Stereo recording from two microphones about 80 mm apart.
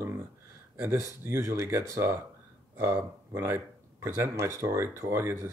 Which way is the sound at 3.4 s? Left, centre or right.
Right.